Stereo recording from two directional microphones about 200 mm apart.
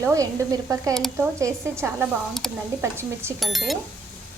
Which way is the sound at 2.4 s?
Centre (ahead or behind).